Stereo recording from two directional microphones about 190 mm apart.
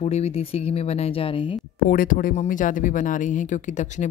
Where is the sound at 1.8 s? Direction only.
45° left (ahead or behind).